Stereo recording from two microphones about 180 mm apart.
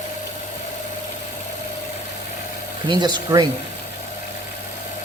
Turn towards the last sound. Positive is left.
turn(degrees=-25)  # may be behind; listen again after turning